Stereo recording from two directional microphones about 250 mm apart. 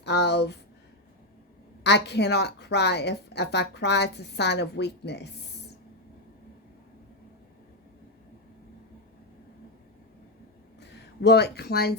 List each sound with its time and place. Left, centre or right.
0.0 s a woman's voice: left
1.8 s a woman's voice: left
10.8 s speech: left